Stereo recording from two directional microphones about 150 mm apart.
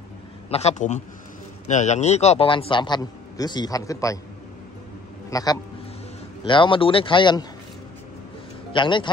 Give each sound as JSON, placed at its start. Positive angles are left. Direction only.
{"t": 0.5, "sound": "a man's voice", "side_deg": 45}
{"t": 5.3, "sound": "a man's voice", "side_deg": 25}
{"t": 8.7, "sound": "a man's voice", "side_deg": 30}